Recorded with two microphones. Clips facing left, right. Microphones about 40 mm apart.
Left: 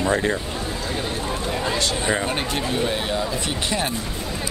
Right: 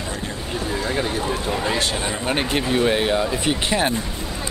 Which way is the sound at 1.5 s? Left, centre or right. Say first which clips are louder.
Left 1 dB; centre.